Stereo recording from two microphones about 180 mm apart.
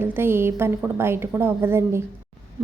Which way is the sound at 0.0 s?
10° right (ahead or behind).